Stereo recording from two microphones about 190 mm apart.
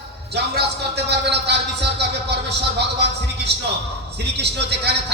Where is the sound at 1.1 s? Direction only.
60° right (ahead or behind).